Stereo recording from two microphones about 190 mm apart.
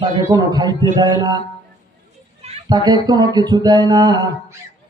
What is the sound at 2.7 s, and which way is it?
A man's voice, 20° right (ahead or behind).